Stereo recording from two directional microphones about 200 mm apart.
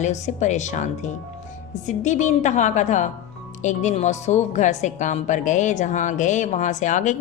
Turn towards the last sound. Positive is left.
turn(degrees=40)  # may be behind; listen again after turning